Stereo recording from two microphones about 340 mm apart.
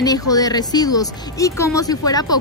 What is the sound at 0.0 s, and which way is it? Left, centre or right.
A woman's voice, centre.